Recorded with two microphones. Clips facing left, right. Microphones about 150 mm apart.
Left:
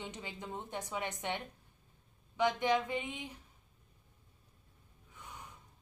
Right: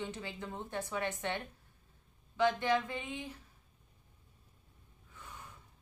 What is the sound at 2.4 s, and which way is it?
Speech, 15° left (ahead or behind).